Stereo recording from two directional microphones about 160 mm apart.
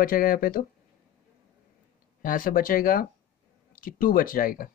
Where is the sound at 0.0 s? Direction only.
65° left (ahead or behind).